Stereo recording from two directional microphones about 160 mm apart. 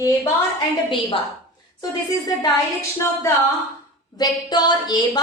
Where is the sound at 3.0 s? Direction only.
20° left (ahead or behind).